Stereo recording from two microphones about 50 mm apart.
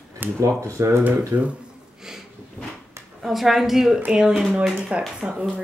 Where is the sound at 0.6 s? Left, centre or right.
Right.